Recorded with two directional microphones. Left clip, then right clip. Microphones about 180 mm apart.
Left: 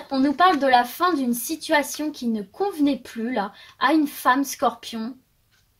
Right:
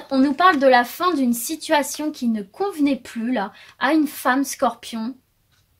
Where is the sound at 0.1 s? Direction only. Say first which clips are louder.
Right 2 dB; 40° right (ahead or behind).